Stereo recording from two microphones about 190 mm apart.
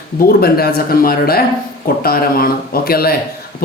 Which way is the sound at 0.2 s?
55° left (ahead or behind).